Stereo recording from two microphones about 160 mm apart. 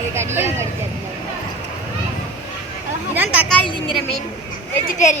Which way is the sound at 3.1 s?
10° right (ahead or behind).